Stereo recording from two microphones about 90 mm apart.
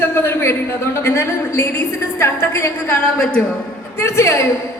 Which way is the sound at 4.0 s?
30° left (ahead or behind).